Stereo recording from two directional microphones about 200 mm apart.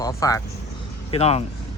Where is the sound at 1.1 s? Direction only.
30° left (ahead or behind).